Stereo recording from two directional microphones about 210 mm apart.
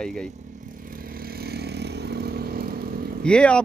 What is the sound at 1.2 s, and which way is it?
Vehicle, 45° right (ahead or behind).